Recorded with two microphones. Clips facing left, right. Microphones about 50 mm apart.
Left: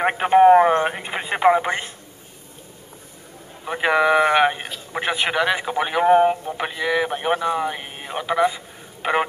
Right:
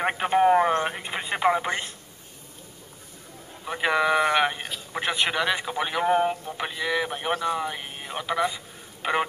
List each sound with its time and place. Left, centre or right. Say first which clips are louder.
0.0 s a man's voice: left 7 dB; centre
3.6 s a man's voice: left 5 dB; centre